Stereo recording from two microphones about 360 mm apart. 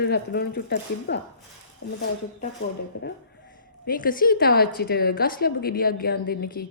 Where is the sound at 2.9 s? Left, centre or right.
Left.